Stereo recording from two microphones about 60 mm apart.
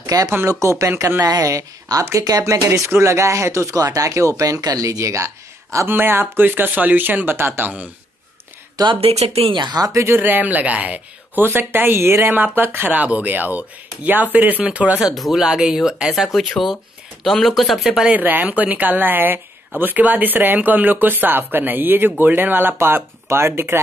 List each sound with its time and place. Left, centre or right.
0.0 s speech: right
0.5 s speech: right
1.2 s speech: right
2.4 s speech: right
2.9 s speech: right
5.9 s speech: right
7.6 s speech: right
8.8 s speech: right
10.0 s speech: right
11.4 s speech: right
15.1 s speech: centre
15.4 s speech: centre
17.3 s speech: centre
18.0 s speech: right